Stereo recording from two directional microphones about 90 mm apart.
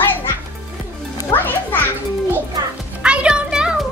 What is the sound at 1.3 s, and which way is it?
Music, 20° left (ahead or behind).